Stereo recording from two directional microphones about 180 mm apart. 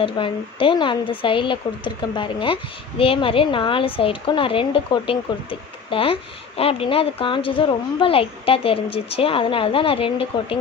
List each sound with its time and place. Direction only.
0.0 s speech: 30° left (ahead or behind)